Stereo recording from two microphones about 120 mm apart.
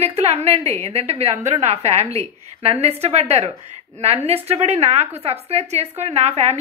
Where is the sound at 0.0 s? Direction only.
65° right (ahead or behind).